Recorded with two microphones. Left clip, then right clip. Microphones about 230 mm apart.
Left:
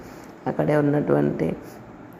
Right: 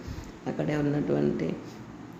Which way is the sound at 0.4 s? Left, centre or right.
Centre.